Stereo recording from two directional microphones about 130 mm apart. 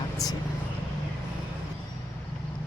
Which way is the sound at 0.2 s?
30° left (ahead or behind).